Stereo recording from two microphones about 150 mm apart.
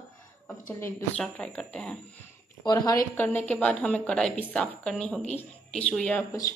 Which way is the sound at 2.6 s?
25° left (ahead or behind).